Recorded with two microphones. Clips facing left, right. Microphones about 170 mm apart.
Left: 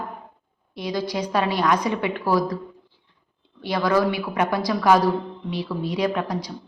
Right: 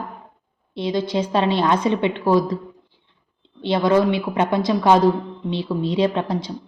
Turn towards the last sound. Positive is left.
turn(degrees=-25)  # may be behind; listen again after turning